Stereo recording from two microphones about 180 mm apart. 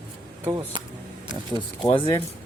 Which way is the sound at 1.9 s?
30° left (ahead or behind).